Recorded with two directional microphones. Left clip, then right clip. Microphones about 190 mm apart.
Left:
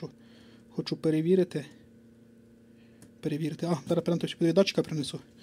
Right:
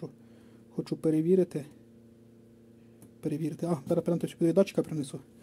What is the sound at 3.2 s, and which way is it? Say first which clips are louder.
Speech: left 1 dB; 10° right (ahead or behind).